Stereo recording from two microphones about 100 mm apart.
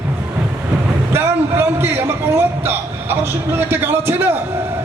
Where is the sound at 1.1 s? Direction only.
25° right (ahead or behind).